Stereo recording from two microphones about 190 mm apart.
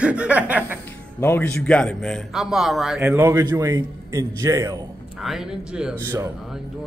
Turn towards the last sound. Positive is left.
turn(degrees=-15)  # may be behind; listen again after turning